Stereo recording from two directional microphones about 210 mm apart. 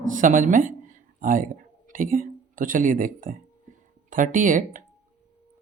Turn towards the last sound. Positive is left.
turn(degrees=-40)  # may be behind; listen again after turning